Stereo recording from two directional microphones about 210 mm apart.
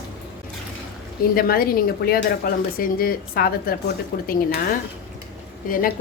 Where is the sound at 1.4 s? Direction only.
45° left (ahead or behind).